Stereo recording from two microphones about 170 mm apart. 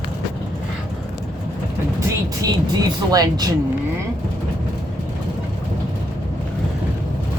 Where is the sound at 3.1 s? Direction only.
20° right (ahead or behind).